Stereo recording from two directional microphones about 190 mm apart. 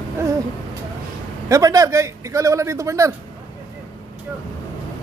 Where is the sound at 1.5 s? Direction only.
15° right (ahead or behind).